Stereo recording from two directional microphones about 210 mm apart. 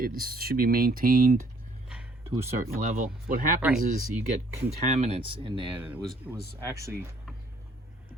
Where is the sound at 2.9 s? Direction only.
40° right (ahead or behind).